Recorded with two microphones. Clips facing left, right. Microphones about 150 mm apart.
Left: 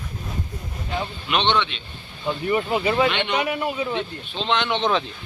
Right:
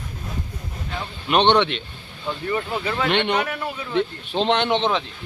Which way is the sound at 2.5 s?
15° left (ahead or behind).